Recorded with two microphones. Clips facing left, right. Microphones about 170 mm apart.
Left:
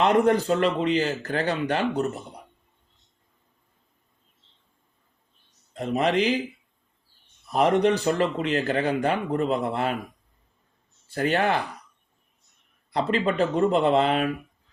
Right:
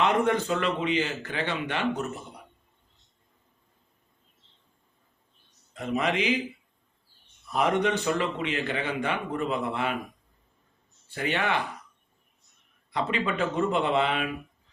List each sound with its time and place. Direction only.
0.0 s a man's voice: 35° left (ahead or behind)
5.7 s a man's voice: 35° left (ahead or behind)
7.8 s a man's voice: 35° left (ahead or behind)
11.1 s a man's voice: 40° left (ahead or behind)
12.9 s a man's voice: 35° left (ahead or behind)